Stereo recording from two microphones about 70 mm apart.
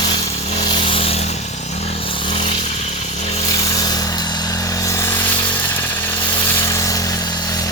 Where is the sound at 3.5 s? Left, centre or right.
Left.